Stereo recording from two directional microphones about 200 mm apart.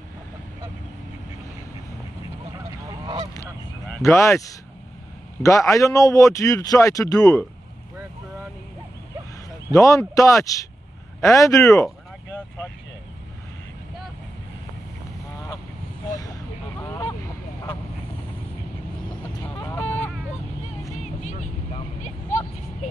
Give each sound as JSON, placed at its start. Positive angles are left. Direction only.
{"t": 2.5, "sound": "honk", "side_deg": -20}
{"t": 3.9, "sound": "a man's voice", "side_deg": 15}
{"t": 9.7, "sound": "a man's voice", "side_deg": 15}
{"t": 16.1, "sound": "honk", "side_deg": 15}
{"t": 19.2, "sound": "a sound", "side_deg": 10}
{"t": 21.0, "sound": "vehicle", "side_deg": 35}